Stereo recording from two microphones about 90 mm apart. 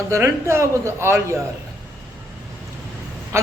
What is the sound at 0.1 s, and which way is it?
Speech, 30° right (ahead or behind).